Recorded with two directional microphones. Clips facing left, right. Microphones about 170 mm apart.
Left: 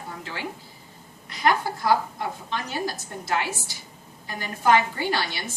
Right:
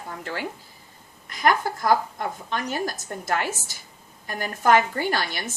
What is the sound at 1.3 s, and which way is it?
A woman's voice, 45° right (ahead or behind).